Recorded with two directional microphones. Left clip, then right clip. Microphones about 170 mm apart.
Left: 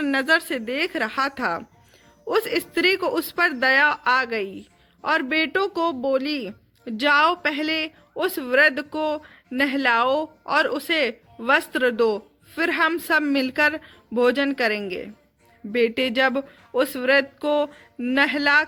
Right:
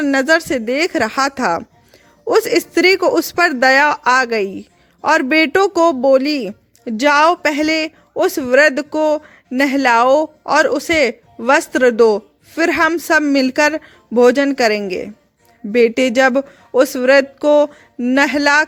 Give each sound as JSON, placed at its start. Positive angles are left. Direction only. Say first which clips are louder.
{"t": 0.0, "sound": "speech", "louder": "right 7 dB", "side_deg": -45}